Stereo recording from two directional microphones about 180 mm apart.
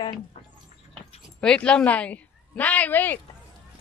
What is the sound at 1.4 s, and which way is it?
A woman's voice, 5° left (ahead or behind).